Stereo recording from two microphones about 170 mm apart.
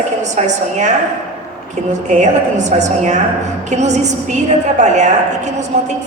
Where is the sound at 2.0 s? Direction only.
45° right (ahead or behind).